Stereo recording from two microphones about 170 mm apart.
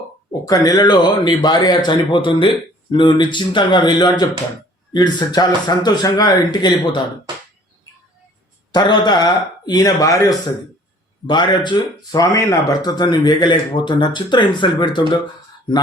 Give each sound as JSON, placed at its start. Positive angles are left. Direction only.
{"t": 0.4, "sound": "speech", "side_deg": 20}
{"t": 7.3, "sound": "finger snapping", "side_deg": -25}
{"t": 8.7, "sound": "speech", "side_deg": 25}